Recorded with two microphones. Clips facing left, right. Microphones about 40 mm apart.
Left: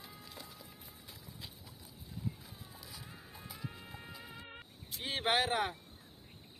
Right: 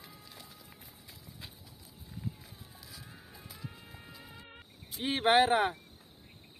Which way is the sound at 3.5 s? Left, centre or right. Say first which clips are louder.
Left 1 dB; centre.